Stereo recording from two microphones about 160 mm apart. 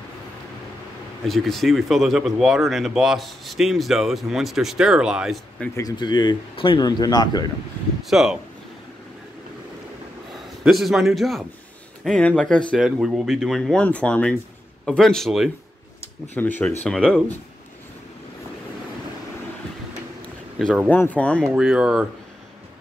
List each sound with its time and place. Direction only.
1.2 s speech: centre (ahead or behind)
5.8 s speech: 25° left (ahead or behind)
8.0 s speech: centre (ahead or behind)
10.6 s speech: centre (ahead or behind)
16.3 s speech: 10° left (ahead or behind)
20.5 s speech: centre (ahead or behind)
20.9 s speech: 10° left (ahead or behind)
21.5 s speech: 5° right (ahead or behind)